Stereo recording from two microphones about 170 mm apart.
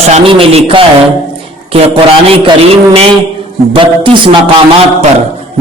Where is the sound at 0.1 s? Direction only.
35° right (ahead or behind).